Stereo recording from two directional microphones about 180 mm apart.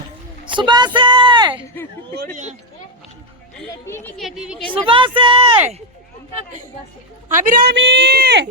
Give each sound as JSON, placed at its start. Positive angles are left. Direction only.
{"t": 0.4, "sound": "a woman's voice", "side_deg": -25}
{"t": 2.1, "sound": "speech", "side_deg": -50}
{"t": 4.2, "sound": "a woman's voice", "side_deg": -5}
{"t": 4.6, "sound": "speech", "side_deg": -30}
{"t": 7.3, "sound": "a man's voice", "side_deg": -50}